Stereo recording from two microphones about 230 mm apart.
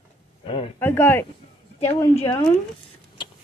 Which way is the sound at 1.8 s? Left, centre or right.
Left.